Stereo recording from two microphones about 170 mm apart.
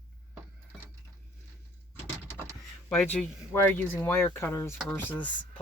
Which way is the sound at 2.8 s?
5° left (ahead or behind).